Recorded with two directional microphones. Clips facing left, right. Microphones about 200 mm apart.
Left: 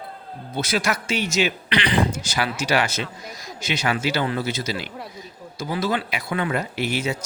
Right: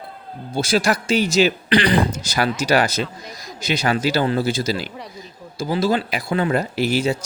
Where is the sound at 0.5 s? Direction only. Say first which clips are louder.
Right 5 dB; 30° right (ahead or behind).